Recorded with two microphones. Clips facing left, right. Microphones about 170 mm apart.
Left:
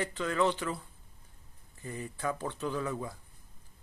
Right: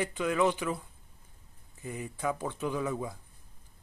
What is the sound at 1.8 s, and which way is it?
Speech, 10° right (ahead or behind).